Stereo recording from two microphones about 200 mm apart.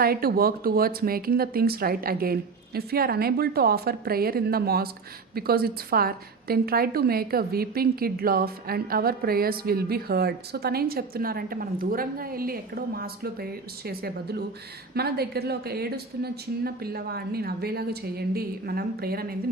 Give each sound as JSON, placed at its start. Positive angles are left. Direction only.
{"t": 0.0, "sound": "a woman's voice", "side_deg": -50}